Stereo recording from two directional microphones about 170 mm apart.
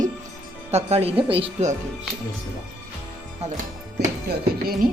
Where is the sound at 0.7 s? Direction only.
40° right (ahead or behind).